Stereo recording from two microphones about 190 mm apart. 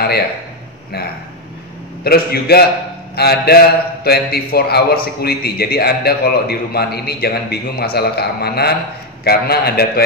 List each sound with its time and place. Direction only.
2.0 s a man's voice: 55° left (ahead or behind)